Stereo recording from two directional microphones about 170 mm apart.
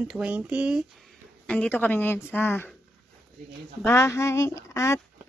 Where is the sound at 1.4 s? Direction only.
10° left (ahead or behind).